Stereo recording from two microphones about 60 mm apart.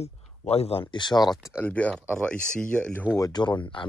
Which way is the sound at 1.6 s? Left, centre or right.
Left.